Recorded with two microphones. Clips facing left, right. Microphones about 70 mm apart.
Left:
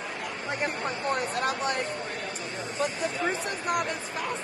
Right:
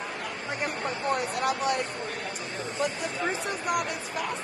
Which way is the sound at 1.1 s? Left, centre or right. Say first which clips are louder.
Right 2 dB; left.